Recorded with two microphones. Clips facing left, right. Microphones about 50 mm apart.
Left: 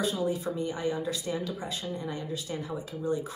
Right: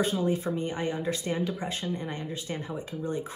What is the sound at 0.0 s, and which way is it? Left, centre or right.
Speech, right.